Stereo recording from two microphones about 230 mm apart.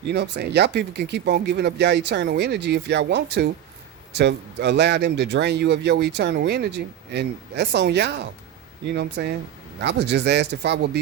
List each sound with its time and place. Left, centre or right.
0.1 s a man's voice: right